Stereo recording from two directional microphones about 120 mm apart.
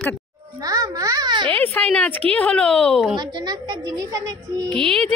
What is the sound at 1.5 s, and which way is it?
Speech, 10° left (ahead or behind).